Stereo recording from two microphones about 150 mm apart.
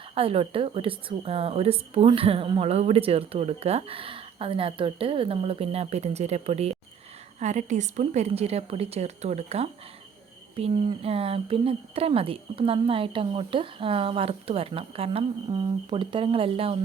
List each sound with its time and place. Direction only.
0.1 s a woman's voice: 40° right (ahead or behind)